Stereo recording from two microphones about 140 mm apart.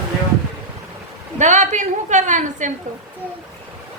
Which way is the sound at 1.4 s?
60° right (ahead or behind).